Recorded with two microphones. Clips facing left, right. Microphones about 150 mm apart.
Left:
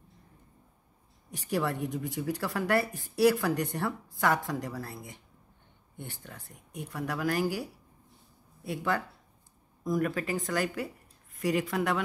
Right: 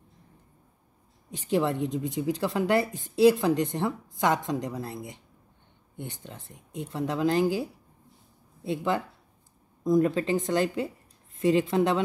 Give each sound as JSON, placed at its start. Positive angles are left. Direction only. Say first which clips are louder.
{"t": 1.3, "sound": "a woman's voice", "louder": "right 5 dB", "side_deg": -20}